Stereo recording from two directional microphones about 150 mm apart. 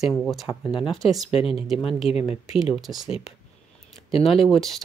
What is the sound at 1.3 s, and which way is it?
Speech, 40° left (ahead or behind).